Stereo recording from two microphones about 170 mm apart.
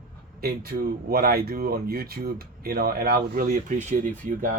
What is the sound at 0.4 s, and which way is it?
Speech, 60° right (ahead or behind).